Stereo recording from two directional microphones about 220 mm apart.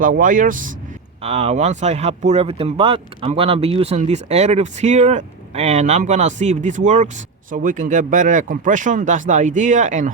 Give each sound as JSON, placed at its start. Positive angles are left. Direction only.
{"t": 0.0, "sound": "speech", "side_deg": -35}